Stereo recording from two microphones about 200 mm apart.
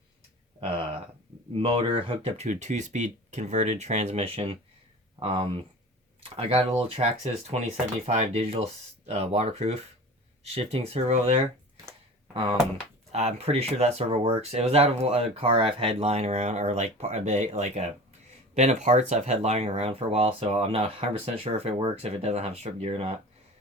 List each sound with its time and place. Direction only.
1.5 s speech: 25° right (ahead or behind)
12.3 s speech: 25° right (ahead or behind)